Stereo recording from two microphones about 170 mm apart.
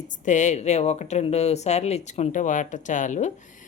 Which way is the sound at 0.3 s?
45° left (ahead or behind).